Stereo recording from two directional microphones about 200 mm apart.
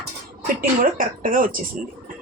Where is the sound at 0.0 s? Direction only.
45° right (ahead or behind).